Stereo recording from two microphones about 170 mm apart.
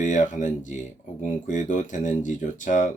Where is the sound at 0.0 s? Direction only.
45° left (ahead or behind).